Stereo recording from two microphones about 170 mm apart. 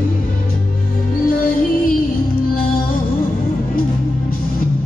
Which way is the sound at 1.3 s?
55° left (ahead or behind).